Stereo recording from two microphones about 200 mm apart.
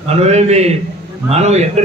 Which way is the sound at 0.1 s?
35° right (ahead or behind).